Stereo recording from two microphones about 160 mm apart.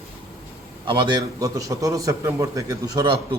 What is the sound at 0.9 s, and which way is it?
A man's voice, 30° right (ahead or behind).